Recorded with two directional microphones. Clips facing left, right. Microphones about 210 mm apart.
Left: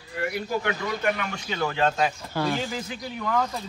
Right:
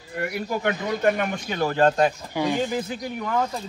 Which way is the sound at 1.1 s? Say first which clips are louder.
Right 5 dB; 50° right (ahead or behind).